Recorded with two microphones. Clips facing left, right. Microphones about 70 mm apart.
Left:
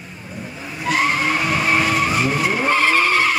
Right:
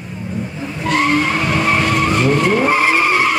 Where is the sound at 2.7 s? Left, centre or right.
Centre.